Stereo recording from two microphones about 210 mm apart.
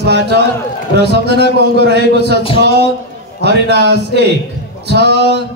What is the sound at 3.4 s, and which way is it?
Speech, 55° right (ahead or behind).